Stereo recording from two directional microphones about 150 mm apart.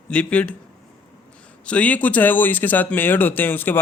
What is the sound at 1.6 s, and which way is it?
Speech, 10° left (ahead or behind).